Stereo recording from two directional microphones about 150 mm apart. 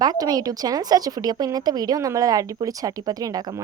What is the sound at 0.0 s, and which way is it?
A woman's voice, 25° right (ahead or behind).